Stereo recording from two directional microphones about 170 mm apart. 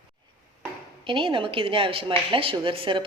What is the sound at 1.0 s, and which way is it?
A woman's voice, 30° right (ahead or behind).